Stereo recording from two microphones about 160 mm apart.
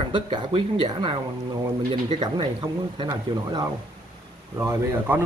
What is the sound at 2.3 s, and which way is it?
Speech, 30° right (ahead or behind).